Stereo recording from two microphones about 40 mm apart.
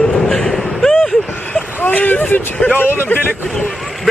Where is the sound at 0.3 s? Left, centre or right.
Centre.